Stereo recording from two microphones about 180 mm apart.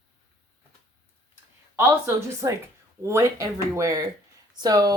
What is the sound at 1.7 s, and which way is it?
Speech, 15° right (ahead or behind).